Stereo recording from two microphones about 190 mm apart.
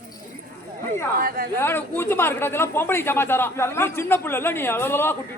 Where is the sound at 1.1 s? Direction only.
50° right (ahead or behind).